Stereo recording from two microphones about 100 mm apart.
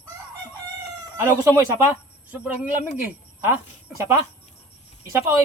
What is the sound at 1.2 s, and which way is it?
Speech, 25° right (ahead or behind).